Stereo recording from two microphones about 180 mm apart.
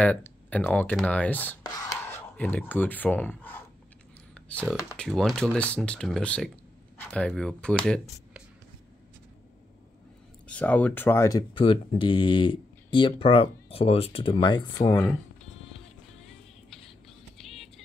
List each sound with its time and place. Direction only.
0.0 s speech: 10° left (ahead or behind)
1.6 s speech: 20° left (ahead or behind)
4.3 s computer keyboard: 5° left (ahead or behind)
4.9 s speech: centre (ahead or behind)
10.4 s speech: 10° left (ahead or behind); by 14.7 s 25° left (ahead or behind)
14.9 s speech: 10° left (ahead or behind)
17.4 s music: centre (ahead or behind)